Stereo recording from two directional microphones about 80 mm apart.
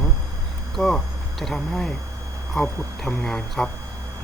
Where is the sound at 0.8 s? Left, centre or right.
Centre.